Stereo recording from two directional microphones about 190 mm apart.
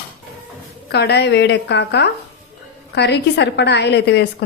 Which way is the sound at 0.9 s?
60° left (ahead or behind).